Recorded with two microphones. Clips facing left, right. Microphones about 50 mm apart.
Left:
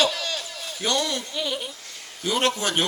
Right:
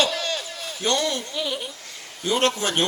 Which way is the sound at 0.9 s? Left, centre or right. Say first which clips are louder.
Right 1 dB; centre.